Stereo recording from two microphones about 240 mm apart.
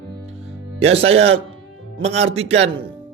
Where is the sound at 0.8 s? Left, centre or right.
Right.